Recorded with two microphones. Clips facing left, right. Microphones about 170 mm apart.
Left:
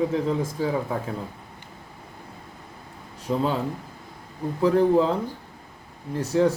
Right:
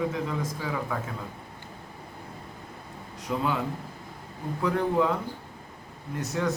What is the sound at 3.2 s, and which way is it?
Speech, 30° left (ahead or behind).